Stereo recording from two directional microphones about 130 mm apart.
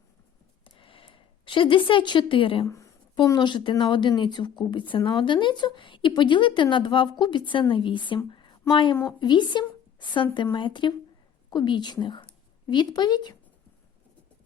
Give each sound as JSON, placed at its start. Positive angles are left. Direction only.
{"t": 0.6, "sound": "a sound", "side_deg": 40}
{"t": 2.6, "sound": "speech", "side_deg": 25}
{"t": 3.2, "sound": "a woman's voice", "side_deg": 35}